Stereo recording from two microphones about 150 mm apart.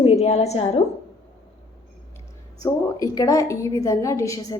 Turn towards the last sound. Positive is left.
turn(degrees=20)  # may be behind; listen again after turning